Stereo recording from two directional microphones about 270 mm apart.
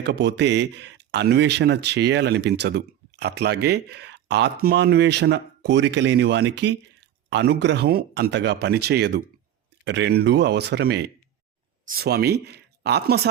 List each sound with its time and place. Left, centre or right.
0.0 s speech: right